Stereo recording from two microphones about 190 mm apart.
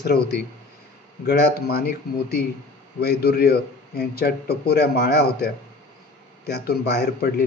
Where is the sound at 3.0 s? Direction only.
55° left (ahead or behind).